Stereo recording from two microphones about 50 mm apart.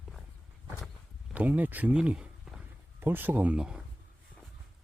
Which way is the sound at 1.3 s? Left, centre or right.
Right.